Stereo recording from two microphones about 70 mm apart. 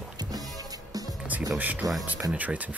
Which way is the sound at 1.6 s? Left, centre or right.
Right.